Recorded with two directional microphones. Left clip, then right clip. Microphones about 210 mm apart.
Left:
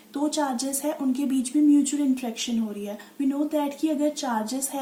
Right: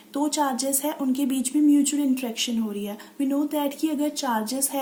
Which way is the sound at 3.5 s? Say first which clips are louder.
Even; 40° right (ahead or behind).